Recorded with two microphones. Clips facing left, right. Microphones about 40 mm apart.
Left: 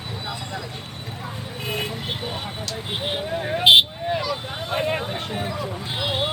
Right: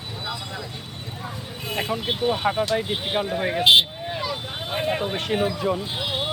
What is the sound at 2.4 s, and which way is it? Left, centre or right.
Speech, right.